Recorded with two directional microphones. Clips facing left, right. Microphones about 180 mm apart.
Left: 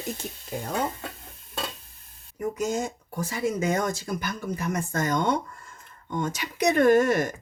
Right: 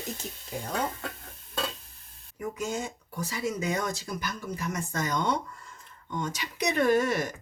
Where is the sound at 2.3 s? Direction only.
40° left (ahead or behind).